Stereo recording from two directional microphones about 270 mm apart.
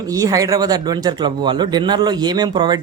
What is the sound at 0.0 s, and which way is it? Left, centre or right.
Speech, centre.